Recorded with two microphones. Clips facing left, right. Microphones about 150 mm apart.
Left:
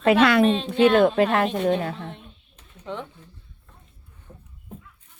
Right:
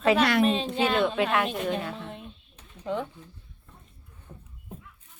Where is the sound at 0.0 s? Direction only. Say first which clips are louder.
Left 4 dB; 65° left (ahead or behind).